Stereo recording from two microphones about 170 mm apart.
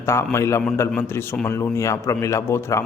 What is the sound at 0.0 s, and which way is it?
A man's voice, 15° left (ahead or behind).